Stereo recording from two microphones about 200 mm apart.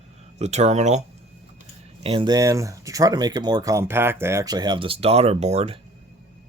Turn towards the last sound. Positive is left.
turn(degrees=-30)  # may be behind; listen again after turning